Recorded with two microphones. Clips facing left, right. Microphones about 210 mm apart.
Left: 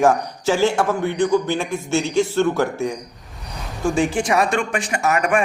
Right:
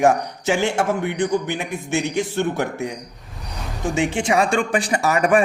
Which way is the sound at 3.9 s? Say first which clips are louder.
Even; 25° right (ahead or behind).